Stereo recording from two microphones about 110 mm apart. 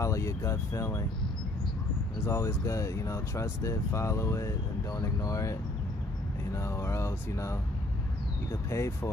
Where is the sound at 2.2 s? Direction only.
25° left (ahead or behind).